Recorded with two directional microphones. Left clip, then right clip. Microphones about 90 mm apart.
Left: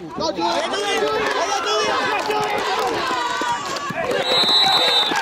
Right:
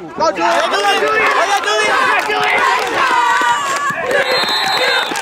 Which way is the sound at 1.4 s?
30° right (ahead or behind).